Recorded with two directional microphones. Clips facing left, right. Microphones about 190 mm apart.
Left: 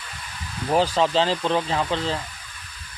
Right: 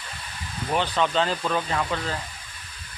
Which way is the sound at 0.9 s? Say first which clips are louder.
Left 3 dB; 30° left (ahead or behind).